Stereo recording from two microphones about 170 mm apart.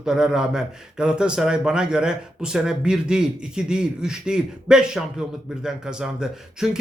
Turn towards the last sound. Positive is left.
turn(degrees=-5)  # may be behind; listen again after turning